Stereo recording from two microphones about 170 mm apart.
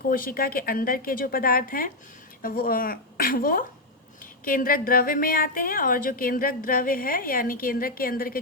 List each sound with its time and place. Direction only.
0.1 s a woman's voice: 55° left (ahead or behind)